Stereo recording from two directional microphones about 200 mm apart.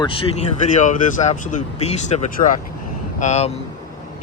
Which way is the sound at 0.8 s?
40° left (ahead or behind).